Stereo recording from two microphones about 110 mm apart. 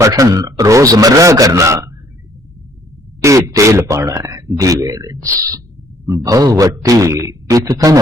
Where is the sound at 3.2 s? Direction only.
30° right (ahead or behind).